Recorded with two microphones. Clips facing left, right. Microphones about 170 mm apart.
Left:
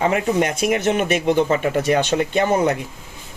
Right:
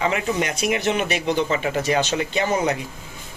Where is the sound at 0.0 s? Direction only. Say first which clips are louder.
Left 4 dB; 45° left (ahead or behind).